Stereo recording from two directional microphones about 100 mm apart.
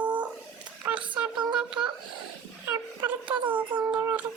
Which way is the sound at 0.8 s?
15° right (ahead or behind).